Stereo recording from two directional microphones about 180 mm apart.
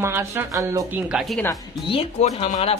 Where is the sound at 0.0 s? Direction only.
15° right (ahead or behind).